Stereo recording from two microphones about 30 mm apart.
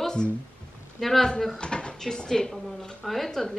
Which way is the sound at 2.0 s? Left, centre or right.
Left.